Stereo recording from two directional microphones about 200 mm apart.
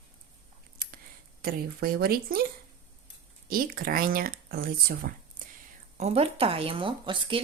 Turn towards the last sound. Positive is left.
turn(degrees=-25)  # may be behind; listen again after turning